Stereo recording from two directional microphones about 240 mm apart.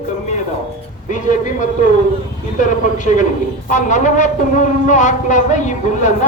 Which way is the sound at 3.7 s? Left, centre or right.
Left.